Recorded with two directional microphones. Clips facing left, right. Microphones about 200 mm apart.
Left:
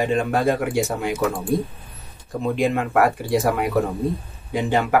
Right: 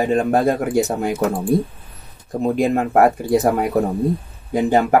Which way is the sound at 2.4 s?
40° right (ahead or behind).